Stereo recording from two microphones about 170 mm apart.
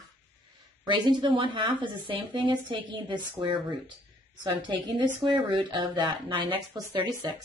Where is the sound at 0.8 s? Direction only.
25° right (ahead or behind).